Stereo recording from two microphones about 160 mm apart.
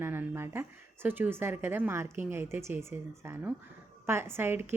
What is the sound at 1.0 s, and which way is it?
A woman's voice, 10° right (ahead or behind).